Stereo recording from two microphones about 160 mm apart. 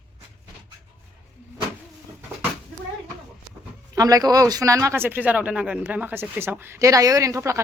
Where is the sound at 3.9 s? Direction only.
20° right (ahead or behind).